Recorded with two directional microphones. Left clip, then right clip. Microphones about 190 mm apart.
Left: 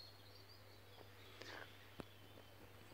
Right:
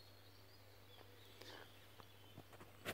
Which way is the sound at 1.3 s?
10° right (ahead or behind).